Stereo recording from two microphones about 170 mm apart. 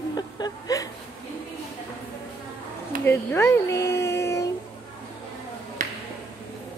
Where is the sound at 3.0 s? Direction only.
15° left (ahead or behind).